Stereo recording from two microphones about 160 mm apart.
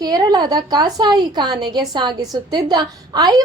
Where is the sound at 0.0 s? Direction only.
25° right (ahead or behind).